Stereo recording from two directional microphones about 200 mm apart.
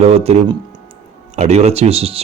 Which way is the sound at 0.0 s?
30° right (ahead or behind).